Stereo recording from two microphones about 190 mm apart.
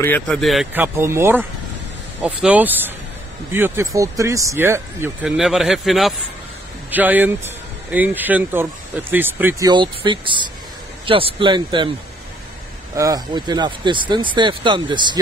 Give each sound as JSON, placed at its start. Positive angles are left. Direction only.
{"t": 0.0, "sound": "speech", "side_deg": 5}
{"t": 0.7, "sound": "speech", "side_deg": -15}
{"t": 9.7, "sound": "speech", "side_deg": -25}
{"t": 12.9, "sound": "speech", "side_deg": -20}